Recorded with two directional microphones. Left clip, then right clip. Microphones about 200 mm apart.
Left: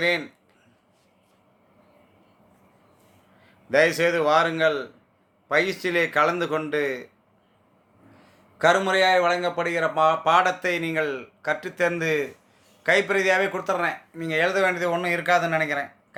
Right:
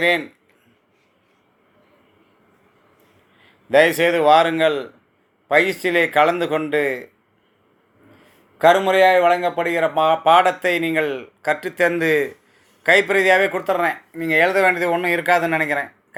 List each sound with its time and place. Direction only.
3.7 s a man's voice: 15° right (ahead or behind)
8.5 s a man's voice: 10° right (ahead or behind)